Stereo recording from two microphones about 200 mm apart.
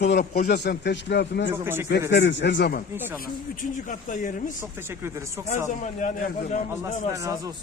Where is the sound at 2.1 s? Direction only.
60° left (ahead or behind).